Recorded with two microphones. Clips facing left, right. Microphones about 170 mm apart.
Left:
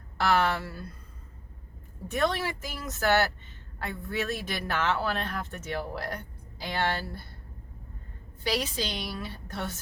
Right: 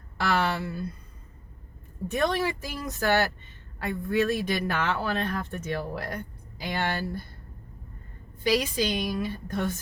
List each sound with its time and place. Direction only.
0.5 s speech: 15° right (ahead or behind)
2.0 s speech: 15° right (ahead or behind)
8.4 s speech: 10° right (ahead or behind)